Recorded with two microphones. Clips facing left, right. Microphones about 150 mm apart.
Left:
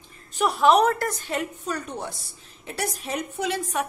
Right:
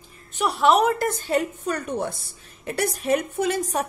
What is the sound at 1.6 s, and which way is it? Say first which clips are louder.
A woman's voice: right 5 dB; 55° right (ahead or behind).